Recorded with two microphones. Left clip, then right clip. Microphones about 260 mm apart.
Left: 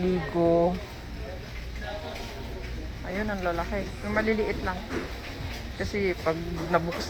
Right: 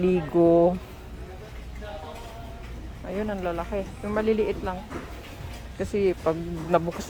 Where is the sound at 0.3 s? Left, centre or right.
Right.